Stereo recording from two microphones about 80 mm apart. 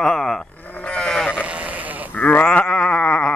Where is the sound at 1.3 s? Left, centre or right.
Centre.